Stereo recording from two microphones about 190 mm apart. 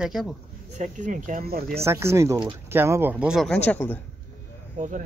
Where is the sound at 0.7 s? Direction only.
40° right (ahead or behind).